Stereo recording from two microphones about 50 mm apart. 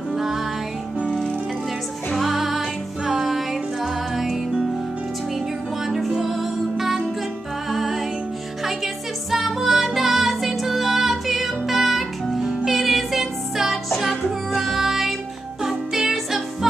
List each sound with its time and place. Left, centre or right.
0.1 s music: centre
1.0 s music: centre
2.1 s music: centre
5.9 s music: centre